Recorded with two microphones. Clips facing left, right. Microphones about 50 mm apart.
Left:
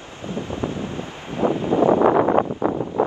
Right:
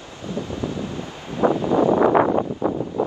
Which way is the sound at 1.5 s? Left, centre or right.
Left.